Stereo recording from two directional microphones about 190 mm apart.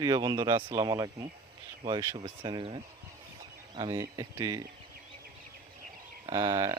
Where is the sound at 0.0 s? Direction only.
20° right (ahead or behind).